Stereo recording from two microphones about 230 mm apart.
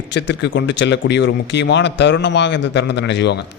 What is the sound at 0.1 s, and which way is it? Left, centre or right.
Speech, left.